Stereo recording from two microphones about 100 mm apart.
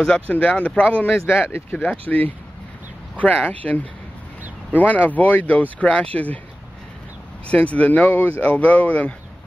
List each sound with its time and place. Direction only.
0.0 s speech: 10° left (ahead or behind)
1.5 s speech: 15° left (ahead or behind)
3.4 s speech: 15° left (ahead or behind)
7.4 s speech: 15° left (ahead or behind)